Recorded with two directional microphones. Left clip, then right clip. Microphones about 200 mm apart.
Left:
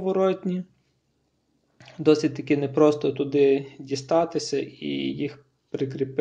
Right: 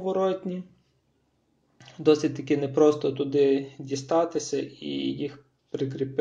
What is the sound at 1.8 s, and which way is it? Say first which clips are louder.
Speech: left 1 dB; 20° left (ahead or behind).